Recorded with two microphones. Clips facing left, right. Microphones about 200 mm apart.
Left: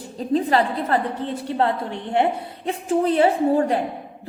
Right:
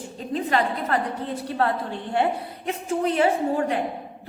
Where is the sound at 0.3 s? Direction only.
35° left (ahead or behind).